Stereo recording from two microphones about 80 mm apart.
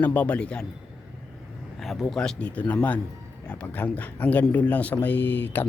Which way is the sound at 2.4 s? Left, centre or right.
Centre.